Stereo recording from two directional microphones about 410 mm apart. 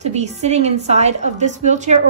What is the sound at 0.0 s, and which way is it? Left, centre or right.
A woman's voice, centre.